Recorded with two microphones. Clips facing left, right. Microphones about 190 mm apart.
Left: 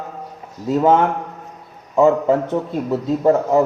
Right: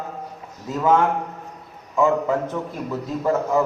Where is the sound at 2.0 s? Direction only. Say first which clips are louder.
Left 6 dB; 30° left (ahead or behind).